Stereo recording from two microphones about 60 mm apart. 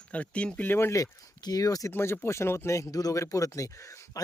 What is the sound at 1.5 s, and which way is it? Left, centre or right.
Speech, left.